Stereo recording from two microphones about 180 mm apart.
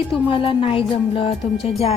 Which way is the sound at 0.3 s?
30° left (ahead or behind).